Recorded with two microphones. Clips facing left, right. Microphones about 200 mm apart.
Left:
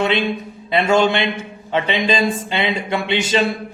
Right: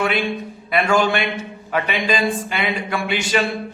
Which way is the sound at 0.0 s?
25° left (ahead or behind).